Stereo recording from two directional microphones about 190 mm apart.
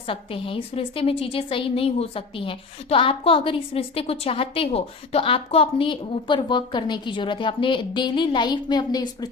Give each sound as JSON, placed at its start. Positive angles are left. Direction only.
{"t": 0.1, "sound": "a woman's voice", "side_deg": 30}